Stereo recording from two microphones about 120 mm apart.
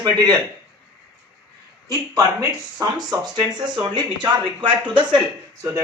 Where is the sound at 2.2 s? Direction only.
30° right (ahead or behind).